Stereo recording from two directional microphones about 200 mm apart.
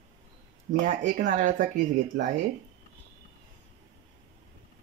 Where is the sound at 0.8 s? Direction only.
40° right (ahead or behind).